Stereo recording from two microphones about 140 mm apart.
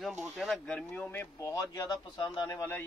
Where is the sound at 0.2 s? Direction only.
Centre (ahead or behind); by 2.7 s 25° left (ahead or behind).